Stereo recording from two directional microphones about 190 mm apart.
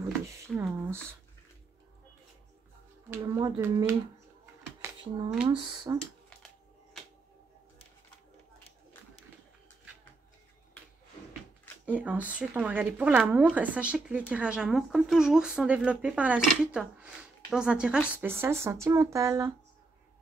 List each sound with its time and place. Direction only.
0.5 s a sound: 10° right (ahead or behind)
3.1 s speech: 15° right (ahead or behind)
4.8 s speech: 5° right (ahead or behind)
5.5 s speech: 25° right (ahead or behind)
11.8 s speech: 5° right (ahead or behind)